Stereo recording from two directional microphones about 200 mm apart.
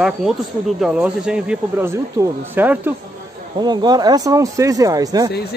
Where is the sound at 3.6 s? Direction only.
20° right (ahead or behind).